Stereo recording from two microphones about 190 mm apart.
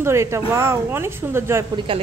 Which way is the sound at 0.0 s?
15° right (ahead or behind).